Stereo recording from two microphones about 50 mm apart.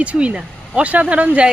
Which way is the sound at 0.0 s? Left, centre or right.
Right.